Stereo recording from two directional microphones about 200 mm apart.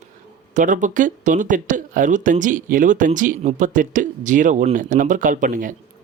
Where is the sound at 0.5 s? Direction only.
40° right (ahead or behind).